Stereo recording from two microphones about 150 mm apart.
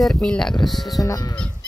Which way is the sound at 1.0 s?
25° left (ahead or behind).